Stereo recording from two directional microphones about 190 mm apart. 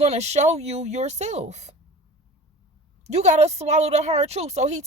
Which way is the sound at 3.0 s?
35° right (ahead or behind).